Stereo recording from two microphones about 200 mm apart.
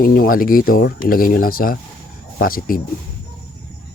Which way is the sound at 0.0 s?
45° left (ahead or behind).